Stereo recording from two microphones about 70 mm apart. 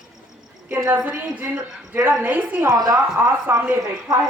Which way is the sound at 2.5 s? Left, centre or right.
Right.